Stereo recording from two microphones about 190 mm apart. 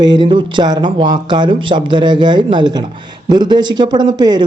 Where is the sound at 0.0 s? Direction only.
25° right (ahead or behind).